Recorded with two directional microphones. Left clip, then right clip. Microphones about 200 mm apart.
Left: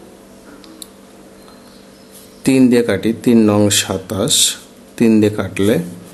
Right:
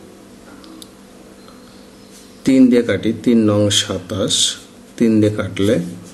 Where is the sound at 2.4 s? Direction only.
30° left (ahead or behind).